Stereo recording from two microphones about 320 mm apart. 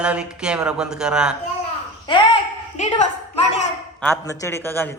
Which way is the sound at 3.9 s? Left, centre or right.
Centre.